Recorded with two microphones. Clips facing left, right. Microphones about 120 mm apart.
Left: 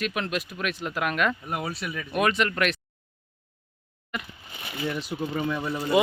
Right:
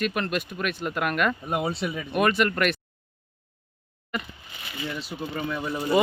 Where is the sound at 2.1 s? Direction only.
Centre (ahead or behind).